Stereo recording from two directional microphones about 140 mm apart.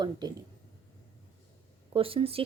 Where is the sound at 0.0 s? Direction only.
30° right (ahead or behind).